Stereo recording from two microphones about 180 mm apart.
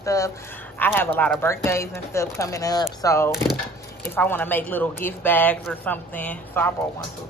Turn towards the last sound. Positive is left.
turn(degrees=10)  # may be behind; listen again after turning